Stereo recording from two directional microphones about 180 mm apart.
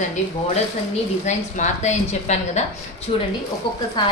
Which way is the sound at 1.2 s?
40° left (ahead or behind).